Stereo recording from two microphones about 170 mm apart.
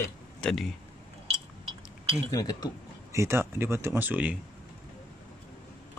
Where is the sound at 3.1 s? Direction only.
15° right (ahead or behind).